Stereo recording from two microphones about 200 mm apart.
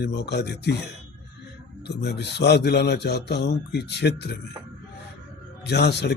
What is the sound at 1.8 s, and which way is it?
Speech, 60° left (ahead or behind).